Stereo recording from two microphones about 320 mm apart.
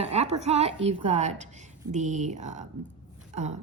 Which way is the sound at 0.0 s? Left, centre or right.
Centre.